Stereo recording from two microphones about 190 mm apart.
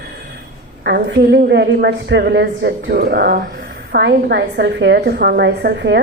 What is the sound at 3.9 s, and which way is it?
A woman's voice, 65° right (ahead or behind).